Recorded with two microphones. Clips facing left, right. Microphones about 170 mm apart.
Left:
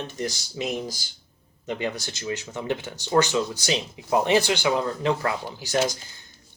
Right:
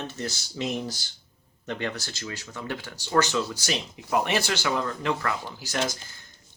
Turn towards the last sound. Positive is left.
turn(degrees=20)  # may be behind; listen again after turning